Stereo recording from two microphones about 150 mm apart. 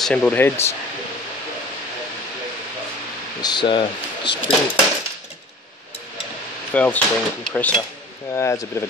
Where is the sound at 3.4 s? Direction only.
30° left (ahead or behind).